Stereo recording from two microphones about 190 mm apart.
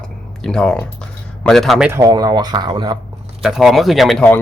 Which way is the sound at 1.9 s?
20° right (ahead or behind).